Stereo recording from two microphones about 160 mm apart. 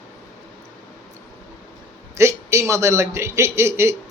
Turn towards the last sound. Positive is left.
turn(degrees=-15)  # may be behind; listen again after turning